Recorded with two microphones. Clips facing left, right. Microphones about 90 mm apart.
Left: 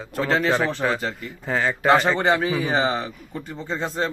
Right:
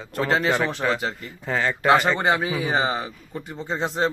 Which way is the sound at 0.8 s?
5° left (ahead or behind).